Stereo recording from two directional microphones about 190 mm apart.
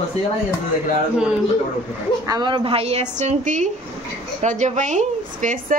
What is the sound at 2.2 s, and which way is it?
A woman's voice, 20° right (ahead or behind).